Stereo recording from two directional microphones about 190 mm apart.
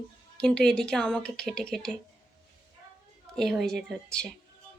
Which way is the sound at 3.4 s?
Centre (ahead or behind).